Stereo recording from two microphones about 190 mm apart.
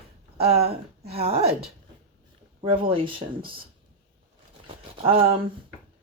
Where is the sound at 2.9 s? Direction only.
30° right (ahead or behind).